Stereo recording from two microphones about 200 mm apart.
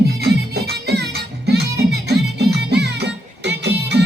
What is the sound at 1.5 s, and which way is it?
Music, 55° right (ahead or behind).